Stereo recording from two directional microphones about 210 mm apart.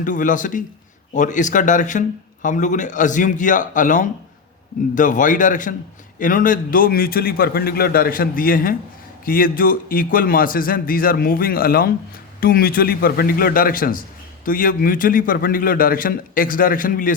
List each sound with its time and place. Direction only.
0.0 s a man's voice: 40° left (ahead or behind)